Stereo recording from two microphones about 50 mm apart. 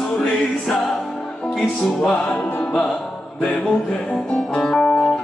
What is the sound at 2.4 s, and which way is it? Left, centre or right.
Music, left.